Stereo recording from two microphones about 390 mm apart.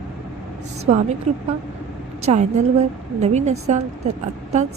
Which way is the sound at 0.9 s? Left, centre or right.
Centre.